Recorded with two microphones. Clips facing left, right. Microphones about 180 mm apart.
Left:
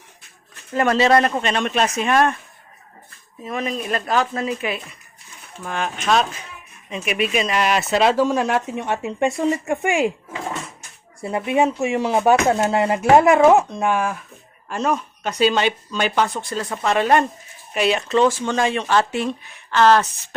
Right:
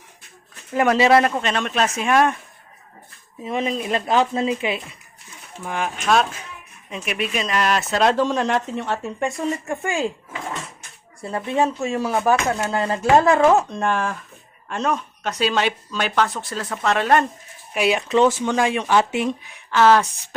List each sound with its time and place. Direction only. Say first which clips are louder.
0.7 s speech: right 1 dB; 10° right (ahead or behind)
3.4 s speech: right 2 dB; 20° right (ahead or behind)
5.6 s speech: even; 10° right (ahead or behind); by 10.1 s 20° left (ahead or behind)
11.2 s speech: left 2 dB; 15° left (ahead or behind)
17.7 s speech: even; 10° right (ahead or behind)